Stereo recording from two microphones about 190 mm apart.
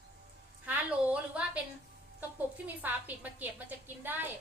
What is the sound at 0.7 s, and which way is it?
Speech, 5° right (ahead or behind).